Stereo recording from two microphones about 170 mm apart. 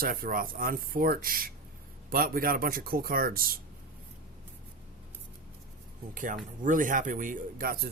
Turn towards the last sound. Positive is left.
turn(degrees=-55)  # may be behind; listen again after turning